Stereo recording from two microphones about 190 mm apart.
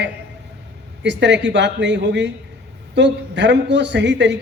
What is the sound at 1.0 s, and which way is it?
A man's voice, 70° right (ahead or behind).